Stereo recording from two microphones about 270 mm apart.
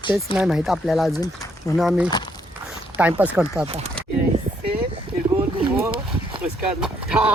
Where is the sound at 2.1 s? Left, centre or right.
Centre.